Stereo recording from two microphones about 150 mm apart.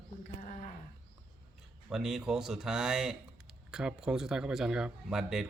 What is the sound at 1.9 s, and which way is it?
Speech, 5° right (ahead or behind).